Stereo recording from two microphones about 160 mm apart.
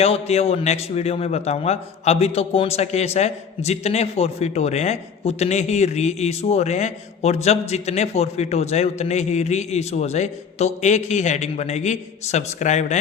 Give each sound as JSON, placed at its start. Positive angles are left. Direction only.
{"t": 0.0, "sound": "a man's voice", "side_deg": 40}